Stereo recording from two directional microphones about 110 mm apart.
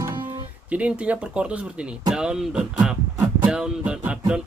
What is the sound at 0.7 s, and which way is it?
Speech, 10° right (ahead or behind).